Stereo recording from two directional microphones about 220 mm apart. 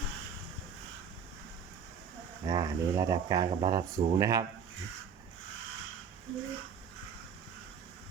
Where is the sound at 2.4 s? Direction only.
15° right (ahead or behind).